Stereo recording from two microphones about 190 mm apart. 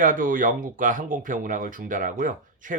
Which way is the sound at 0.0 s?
45° right (ahead or behind).